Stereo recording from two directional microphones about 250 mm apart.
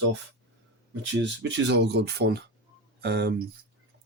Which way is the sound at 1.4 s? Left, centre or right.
Right.